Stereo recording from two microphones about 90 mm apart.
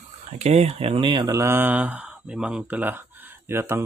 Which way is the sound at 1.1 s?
50° right (ahead or behind).